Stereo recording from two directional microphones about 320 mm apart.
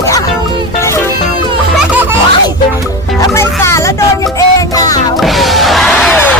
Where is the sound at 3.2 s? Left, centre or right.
Centre.